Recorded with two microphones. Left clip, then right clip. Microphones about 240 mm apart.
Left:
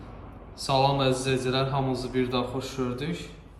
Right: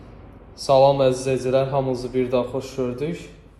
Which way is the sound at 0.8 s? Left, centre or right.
Centre.